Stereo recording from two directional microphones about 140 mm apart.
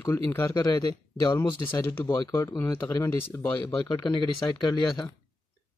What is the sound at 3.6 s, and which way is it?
Speech, 30° left (ahead or behind).